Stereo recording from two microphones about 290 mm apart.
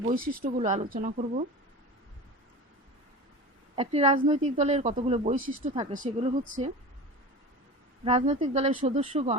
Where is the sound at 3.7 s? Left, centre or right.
Right.